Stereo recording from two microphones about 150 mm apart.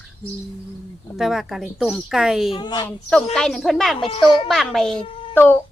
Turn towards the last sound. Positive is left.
turn(degrees=15)  # may be behind; listen again after turning